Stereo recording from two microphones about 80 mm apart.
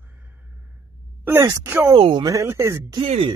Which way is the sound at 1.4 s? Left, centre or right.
Right.